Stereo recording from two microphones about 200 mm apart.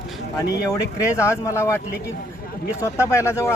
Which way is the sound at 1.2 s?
15° left (ahead or behind).